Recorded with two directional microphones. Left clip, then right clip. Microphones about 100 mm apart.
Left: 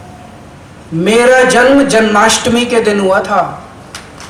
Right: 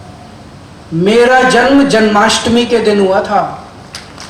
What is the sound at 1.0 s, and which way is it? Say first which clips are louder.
A man's voice: even; 25° left (ahead or behind).